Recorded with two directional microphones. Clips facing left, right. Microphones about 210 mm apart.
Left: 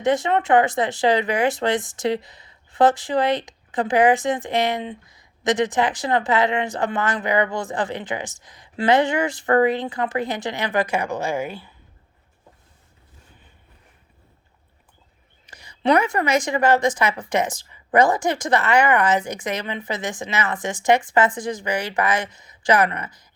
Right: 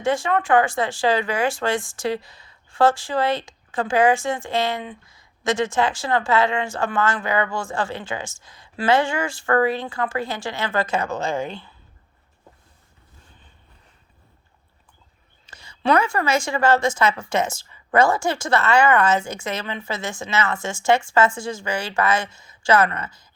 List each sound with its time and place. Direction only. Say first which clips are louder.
0.0 s speech: left 2 dB; 20° left (ahead or behind)
15.4 s a woman's voice: left 1 dB; 15° left (ahead or behind)